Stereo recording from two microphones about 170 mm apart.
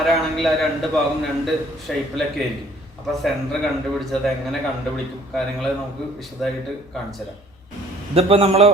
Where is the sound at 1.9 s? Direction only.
Centre (ahead or behind).